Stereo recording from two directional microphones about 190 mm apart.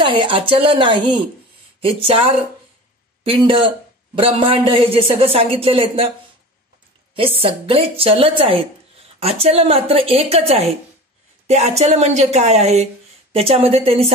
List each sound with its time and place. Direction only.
0.2 s speech: 30° right (ahead or behind)
7.2 s speech: 30° right (ahead or behind)